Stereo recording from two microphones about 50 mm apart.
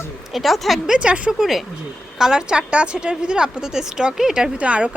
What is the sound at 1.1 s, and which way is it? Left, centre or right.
Speech, right.